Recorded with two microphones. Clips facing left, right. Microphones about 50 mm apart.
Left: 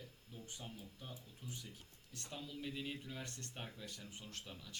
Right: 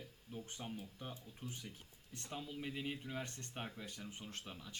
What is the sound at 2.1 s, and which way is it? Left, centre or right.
Speech, right.